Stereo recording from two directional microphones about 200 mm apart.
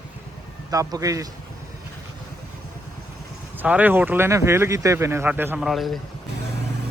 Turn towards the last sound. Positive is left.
turn(degrees=0)  # may be behind; listen again after turning